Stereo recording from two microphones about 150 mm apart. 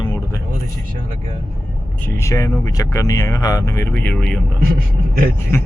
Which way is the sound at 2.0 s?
20° left (ahead or behind).